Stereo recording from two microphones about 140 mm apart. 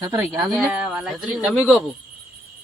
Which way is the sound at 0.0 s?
20° right (ahead or behind).